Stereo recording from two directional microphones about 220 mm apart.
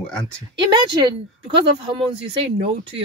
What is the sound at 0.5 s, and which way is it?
Speech, 20° right (ahead or behind).